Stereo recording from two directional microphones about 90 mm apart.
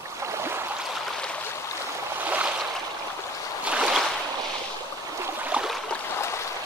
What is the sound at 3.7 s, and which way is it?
Boat, 10° right (ahead or behind).